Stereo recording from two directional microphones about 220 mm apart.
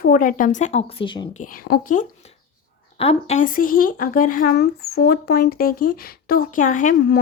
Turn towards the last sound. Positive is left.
turn(degrees=35)  # may be behind; listen again after turning